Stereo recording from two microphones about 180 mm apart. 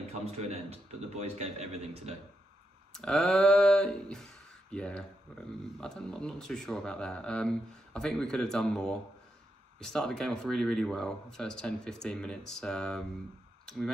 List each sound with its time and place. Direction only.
0.0 s a man's voice: 35° right (ahead or behind)
2.9 s speech: 5° left (ahead or behind)